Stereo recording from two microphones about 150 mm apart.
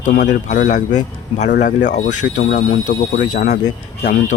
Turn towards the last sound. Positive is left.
turn(degrees=65)  # may be behind; listen again after turning